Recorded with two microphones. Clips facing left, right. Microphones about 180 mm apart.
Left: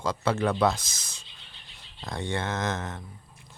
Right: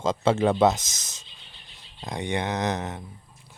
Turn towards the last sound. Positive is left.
turn(degrees=-20)  # may be behind; listen again after turning